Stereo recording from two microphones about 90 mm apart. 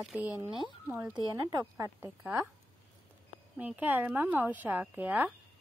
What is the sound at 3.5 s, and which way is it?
A woman's voice, 15° right (ahead or behind).